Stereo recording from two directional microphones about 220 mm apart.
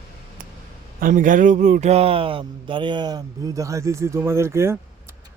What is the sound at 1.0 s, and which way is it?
Speech, 35° right (ahead or behind).